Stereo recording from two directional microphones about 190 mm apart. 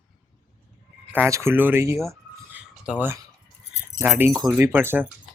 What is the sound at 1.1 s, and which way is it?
Speech, 10° right (ahead or behind).